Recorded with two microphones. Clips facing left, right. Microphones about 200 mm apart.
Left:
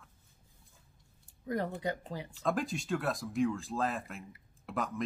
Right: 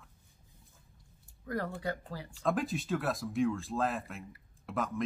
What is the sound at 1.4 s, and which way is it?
Speech, 20° left (ahead or behind).